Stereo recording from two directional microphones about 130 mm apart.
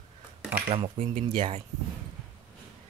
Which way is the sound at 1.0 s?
60° right (ahead or behind).